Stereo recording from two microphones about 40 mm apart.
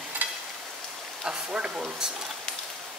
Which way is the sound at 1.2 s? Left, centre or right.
Right.